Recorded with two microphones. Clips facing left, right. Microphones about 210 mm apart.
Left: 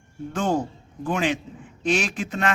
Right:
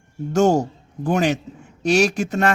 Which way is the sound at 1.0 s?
40° right (ahead or behind).